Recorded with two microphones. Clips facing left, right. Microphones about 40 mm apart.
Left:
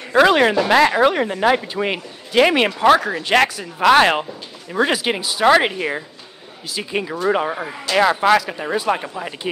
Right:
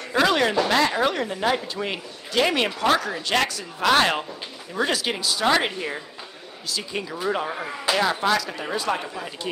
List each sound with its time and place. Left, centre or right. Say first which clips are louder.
0.1 s speech: left 7 dB; left
8.4 s speech: left 6 dB; left